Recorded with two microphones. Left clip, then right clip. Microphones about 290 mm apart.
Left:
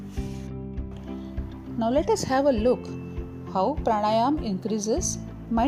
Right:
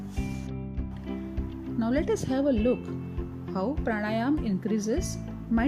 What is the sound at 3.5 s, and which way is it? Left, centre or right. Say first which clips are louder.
Speech: left 7 dB; left.